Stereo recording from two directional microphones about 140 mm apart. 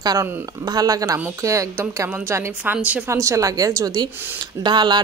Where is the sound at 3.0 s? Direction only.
20° right (ahead or behind).